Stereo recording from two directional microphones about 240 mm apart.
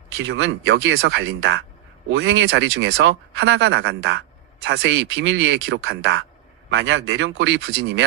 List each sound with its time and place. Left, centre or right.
0.2 s speech: right